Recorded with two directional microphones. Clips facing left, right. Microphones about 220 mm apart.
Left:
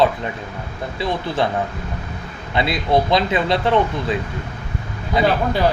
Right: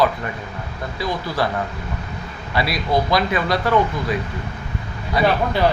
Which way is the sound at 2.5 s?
25° left (ahead or behind).